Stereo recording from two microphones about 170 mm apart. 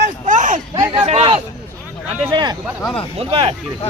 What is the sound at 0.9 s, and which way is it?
Speech, 35° right (ahead or behind).